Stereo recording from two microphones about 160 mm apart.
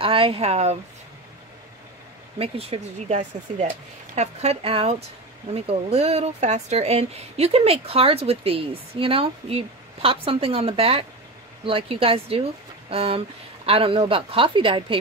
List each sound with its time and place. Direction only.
0.0 s speech: 35° right (ahead or behind)
2.3 s speech: 40° right (ahead or behind)